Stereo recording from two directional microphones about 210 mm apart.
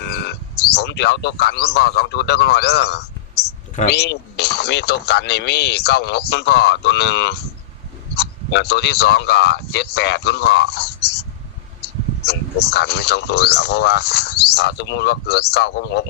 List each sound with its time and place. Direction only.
0.0 s a man's voice: 50° left (ahead or behind)